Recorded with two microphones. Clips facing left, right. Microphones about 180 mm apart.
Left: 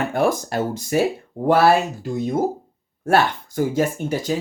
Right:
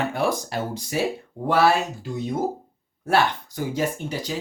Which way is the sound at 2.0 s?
50° left (ahead or behind).